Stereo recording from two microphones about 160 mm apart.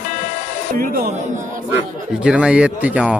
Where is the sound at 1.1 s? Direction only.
45° right (ahead or behind).